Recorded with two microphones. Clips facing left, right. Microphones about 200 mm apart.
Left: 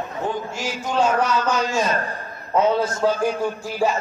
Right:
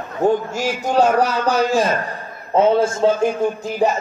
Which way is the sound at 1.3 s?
55° right (ahead or behind).